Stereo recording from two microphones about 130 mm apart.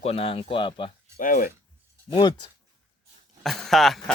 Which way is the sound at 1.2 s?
90° left.